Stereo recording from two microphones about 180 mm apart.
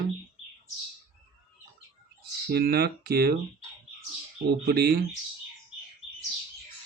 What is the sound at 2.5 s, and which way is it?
Speech, 60° right (ahead or behind).